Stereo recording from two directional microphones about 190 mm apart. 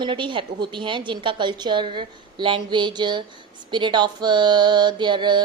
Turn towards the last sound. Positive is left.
turn(degrees=-25)  # may be behind; listen again after turning